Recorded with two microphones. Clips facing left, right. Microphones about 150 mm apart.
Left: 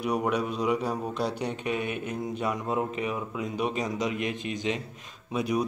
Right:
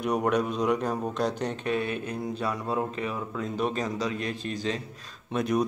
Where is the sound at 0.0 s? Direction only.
5° left (ahead or behind).